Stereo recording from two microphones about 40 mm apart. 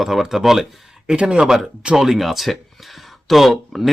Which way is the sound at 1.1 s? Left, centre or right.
Right.